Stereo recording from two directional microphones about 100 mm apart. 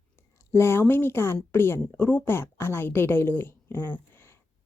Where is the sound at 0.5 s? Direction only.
25° left (ahead or behind).